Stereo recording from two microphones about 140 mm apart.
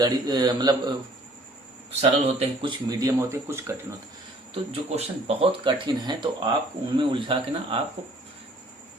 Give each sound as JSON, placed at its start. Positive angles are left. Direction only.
{"t": 0.0, "sound": "speech", "side_deg": -30}
{"t": 2.0, "sound": "speech", "side_deg": -40}
{"t": 4.7, "sound": "speech", "side_deg": -45}